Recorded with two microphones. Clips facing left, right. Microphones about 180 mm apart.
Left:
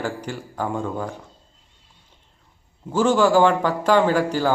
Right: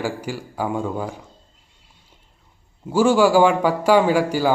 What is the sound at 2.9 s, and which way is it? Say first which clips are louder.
A man's voice: right 2 dB; 10° right (ahead or behind).